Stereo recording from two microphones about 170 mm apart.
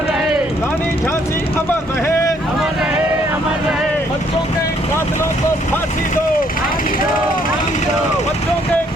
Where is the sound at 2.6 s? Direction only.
5° right (ahead or behind).